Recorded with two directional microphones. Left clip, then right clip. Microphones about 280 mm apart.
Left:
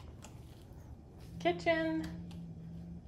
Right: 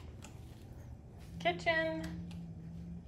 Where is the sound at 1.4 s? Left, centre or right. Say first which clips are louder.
Left 1 dB; left.